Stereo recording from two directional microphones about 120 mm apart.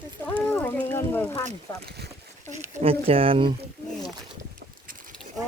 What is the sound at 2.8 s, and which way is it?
Speech, 50° right (ahead or behind).